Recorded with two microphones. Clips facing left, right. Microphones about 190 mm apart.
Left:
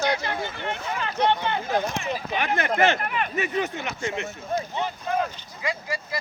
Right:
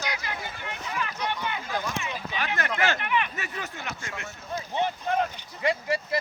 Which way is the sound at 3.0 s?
35° left (ahead or behind).